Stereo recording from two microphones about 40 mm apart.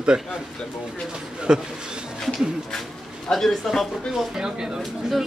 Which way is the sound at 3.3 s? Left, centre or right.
Centre.